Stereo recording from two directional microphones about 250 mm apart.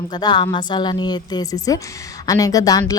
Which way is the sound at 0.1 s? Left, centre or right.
Centre.